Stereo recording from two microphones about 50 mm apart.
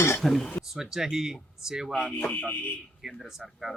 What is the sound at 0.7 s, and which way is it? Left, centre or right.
Speech, centre.